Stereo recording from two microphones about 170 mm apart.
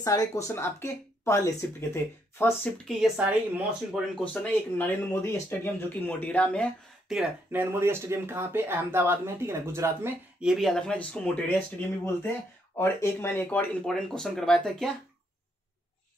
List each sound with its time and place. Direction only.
0.0 s speech: 20° left (ahead or behind)
3.0 s speech: 5° right (ahead or behind)
7.7 s speech: 15° right (ahead or behind)
10.4 s speech: centre (ahead or behind)
12.7 s speech: 15° left (ahead or behind)